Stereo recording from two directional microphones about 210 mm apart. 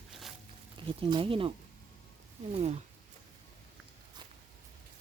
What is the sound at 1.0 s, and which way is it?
Speech, 25° right (ahead or behind).